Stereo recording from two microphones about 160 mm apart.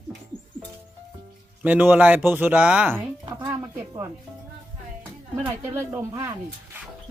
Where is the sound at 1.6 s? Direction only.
10° right (ahead or behind).